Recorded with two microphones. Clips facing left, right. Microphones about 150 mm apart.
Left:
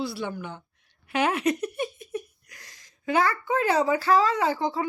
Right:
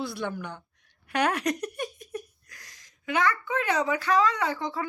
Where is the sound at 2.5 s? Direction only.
25° left (ahead or behind).